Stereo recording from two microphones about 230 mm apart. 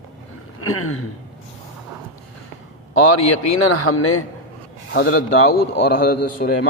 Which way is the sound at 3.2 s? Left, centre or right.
Left.